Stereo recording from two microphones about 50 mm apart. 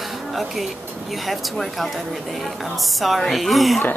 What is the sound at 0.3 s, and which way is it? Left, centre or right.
Speech, centre.